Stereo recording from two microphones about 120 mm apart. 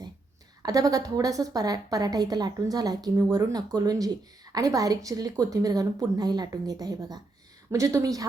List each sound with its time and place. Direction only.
0.6 s a woman's voice: 30° right (ahead or behind)